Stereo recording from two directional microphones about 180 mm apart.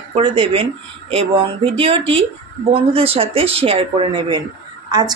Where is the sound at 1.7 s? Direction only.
30° right (ahead or behind).